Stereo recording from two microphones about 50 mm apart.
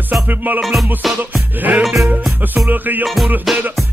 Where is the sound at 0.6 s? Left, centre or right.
Centre.